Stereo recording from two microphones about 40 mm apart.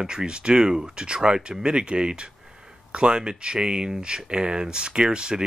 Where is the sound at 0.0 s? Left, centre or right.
Centre.